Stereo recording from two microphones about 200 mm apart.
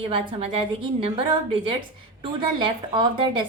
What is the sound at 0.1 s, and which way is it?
A woman's voice, 25° right (ahead or behind).